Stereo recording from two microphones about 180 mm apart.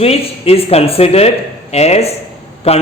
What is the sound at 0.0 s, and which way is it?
A man's voice, 35° left (ahead or behind).